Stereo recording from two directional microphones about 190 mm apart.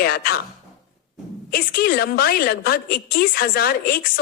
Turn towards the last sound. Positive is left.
turn(degrees=50)  # may be behind; listen again after turning